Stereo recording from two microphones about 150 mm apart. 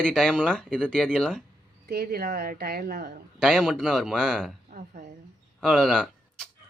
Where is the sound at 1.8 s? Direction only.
90° right.